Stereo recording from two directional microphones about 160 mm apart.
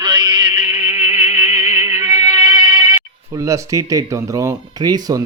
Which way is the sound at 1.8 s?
15° right (ahead or behind).